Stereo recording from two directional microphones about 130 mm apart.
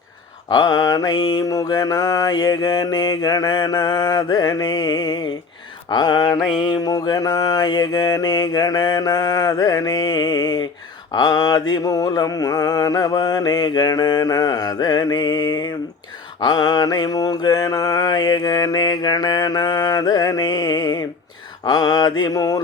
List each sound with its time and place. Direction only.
0.4 s mantra: 30° left (ahead or behind)